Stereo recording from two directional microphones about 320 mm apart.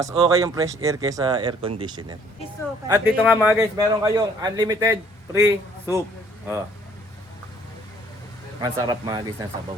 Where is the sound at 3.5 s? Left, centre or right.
Centre.